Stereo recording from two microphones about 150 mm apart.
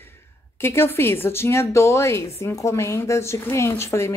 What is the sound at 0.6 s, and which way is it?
A woman's voice, 15° left (ahead or behind).